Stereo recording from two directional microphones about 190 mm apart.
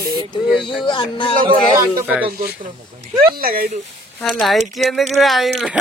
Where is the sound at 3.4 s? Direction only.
50° right (ahead or behind).